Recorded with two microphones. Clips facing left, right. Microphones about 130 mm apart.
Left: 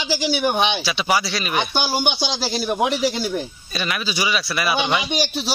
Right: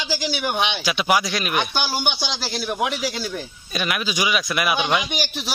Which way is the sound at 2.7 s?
25° left (ahead or behind).